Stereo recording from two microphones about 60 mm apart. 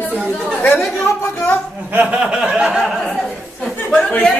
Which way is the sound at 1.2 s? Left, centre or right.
Left.